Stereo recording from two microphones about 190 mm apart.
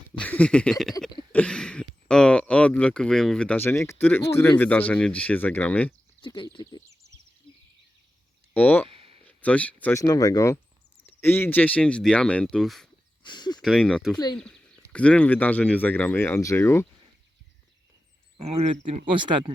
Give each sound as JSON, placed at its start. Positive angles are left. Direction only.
{"t": 0.1, "sound": "speech", "side_deg": 5}
{"t": 6.2, "sound": "speech", "side_deg": 25}
{"t": 7.5, "sound": "a sound", "side_deg": 25}
{"t": 8.5, "sound": "speech", "side_deg": 10}
{"t": 8.9, "sound": "a sound", "side_deg": -30}
{"t": 9.2, "sound": "speech", "side_deg": 5}
{"t": 13.2, "sound": "speech", "side_deg": 25}
{"t": 13.6, "sound": "speech", "side_deg": 0}
{"t": 18.3, "sound": "speech", "side_deg": -30}